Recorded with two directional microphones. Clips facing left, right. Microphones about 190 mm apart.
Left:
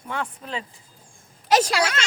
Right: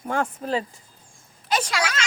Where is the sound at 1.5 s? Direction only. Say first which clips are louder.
Left 5 dB; 40° left (ahead or behind).